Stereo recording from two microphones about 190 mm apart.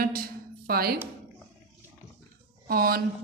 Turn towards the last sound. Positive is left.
turn(degrees=-50)  # may be behind; listen again after turning